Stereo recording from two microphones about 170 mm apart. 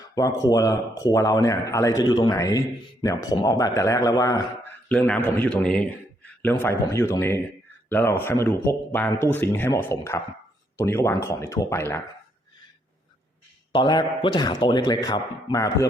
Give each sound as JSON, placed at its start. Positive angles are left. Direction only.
{"t": 0.2, "sound": "speech", "side_deg": 20}
{"t": 4.9, "sound": "speech", "side_deg": 10}
{"t": 13.7, "sound": "speech", "side_deg": 25}